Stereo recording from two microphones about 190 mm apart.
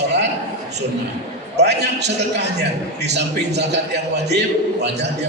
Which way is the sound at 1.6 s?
65° right (ahead or behind).